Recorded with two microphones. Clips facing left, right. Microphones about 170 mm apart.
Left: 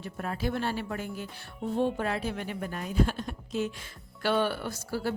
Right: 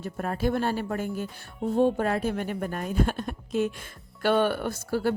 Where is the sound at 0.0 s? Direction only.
45° right (ahead or behind).